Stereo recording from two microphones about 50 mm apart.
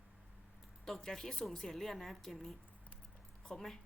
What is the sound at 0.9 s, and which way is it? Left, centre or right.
A woman's voice, centre.